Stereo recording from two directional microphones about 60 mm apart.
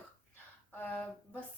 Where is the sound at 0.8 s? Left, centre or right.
Left.